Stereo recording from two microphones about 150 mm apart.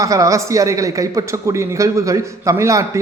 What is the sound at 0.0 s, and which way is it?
A man's voice, 20° right (ahead or behind).